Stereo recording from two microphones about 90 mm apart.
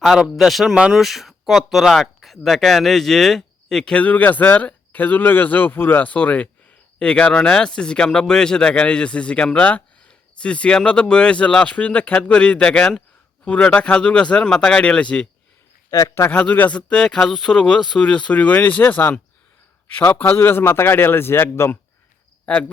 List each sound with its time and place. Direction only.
0.0 s speech: centre (ahead or behind)
15.9 s speech: 35° left (ahead or behind)
16.3 s speech: 15° left (ahead or behind); by 18.0 s centre (ahead or behind)
18.0 s a man's voice: 10° left (ahead or behind); by 21.8 s 25° left (ahead or behind)
22.4 s speech: 15° left (ahead or behind)